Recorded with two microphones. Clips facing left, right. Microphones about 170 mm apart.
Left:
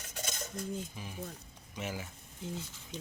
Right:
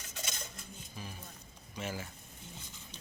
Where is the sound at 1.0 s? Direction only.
15° left (ahead or behind).